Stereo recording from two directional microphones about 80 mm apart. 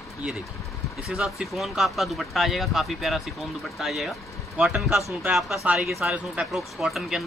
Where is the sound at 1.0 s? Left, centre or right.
Centre.